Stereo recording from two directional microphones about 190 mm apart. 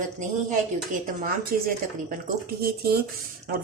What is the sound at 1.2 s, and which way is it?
Speech, 50° right (ahead or behind).